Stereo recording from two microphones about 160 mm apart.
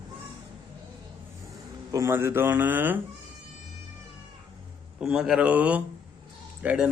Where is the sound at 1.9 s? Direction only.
15° right (ahead or behind).